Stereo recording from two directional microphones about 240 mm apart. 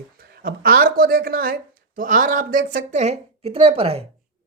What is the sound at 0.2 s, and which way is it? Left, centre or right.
A woman's voice, right.